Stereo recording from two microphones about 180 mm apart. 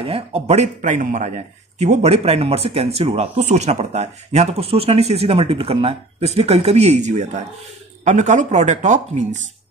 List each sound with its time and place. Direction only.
0.0 s speech: 30° right (ahead or behind)